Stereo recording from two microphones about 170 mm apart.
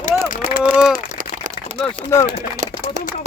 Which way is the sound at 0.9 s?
55° right (ahead or behind).